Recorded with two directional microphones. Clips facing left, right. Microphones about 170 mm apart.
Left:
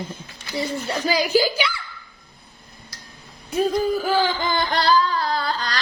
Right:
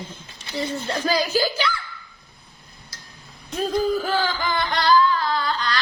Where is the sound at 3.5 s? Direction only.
10° left (ahead or behind).